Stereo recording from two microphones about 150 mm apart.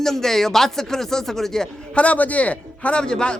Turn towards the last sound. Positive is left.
turn(degrees=5)  # may be behind; listen again after turning